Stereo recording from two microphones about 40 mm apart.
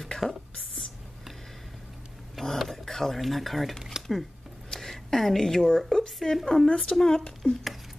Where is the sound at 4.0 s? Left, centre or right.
Centre.